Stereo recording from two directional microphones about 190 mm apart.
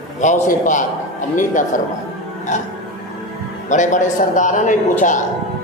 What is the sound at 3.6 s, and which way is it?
A man's voice, 40° left (ahead or behind).